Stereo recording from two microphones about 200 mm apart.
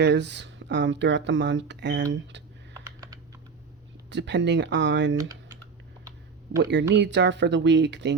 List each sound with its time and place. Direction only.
0.0 s speech: 60° right (ahead or behind)
4.1 s speech: 60° right (ahead or behind)
6.6 s speech: 60° right (ahead or behind)